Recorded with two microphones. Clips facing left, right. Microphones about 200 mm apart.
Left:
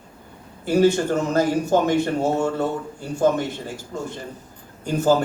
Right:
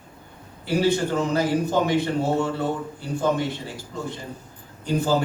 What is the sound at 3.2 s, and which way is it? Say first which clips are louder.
Speech: left 4 dB; 45° left (ahead or behind).